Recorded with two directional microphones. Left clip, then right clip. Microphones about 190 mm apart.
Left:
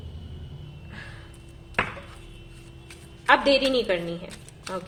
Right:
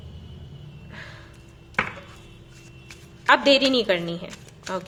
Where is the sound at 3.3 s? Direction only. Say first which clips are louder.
Right 2 dB; 20° right (ahead or behind).